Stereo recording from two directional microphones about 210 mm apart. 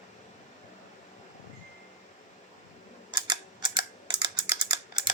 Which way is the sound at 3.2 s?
20° right (ahead or behind).